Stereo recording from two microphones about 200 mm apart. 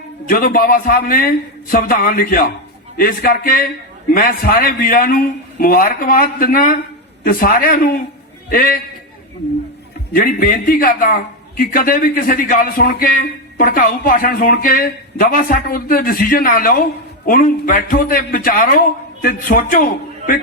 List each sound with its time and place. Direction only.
0.3 s a man's voice: 45° left (ahead or behind)
10.1 s a man's voice: 45° left (ahead or behind)